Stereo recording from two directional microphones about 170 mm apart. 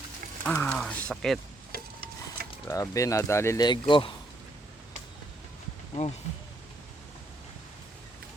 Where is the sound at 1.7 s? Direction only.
65° right (ahead or behind).